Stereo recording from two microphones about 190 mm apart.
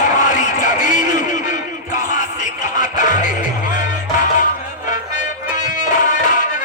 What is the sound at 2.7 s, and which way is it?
Music, 45° left (ahead or behind).